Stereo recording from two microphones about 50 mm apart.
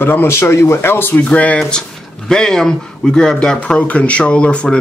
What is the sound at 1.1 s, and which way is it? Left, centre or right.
Speech, left.